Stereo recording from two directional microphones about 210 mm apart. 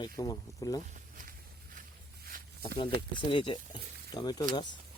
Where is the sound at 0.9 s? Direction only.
40° right (ahead or behind).